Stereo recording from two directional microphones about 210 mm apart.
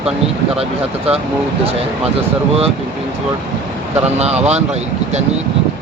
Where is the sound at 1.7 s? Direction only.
30° right (ahead or behind).